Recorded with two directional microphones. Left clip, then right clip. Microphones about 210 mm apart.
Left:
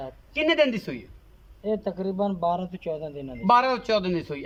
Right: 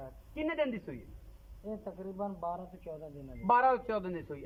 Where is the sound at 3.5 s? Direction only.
5° right (ahead or behind).